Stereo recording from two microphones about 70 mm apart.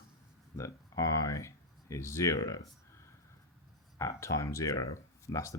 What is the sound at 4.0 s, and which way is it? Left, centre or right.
Speech, left.